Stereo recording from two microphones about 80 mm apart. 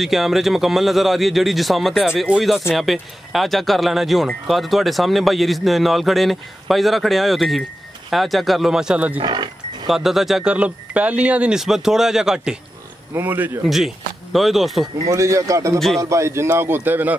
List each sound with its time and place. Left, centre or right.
0.0 s a man's voice: centre
9.2 s speech: right
9.8 s a man's voice: centre
10.5 s a man's voice: centre
13.1 s speech: right
13.7 s speech: centre
15.0 s a man's voice: right